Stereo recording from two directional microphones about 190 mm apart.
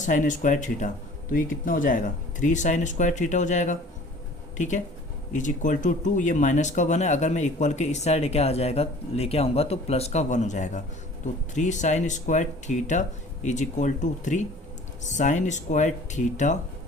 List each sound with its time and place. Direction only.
0.0 s speech: 40° left (ahead or behind)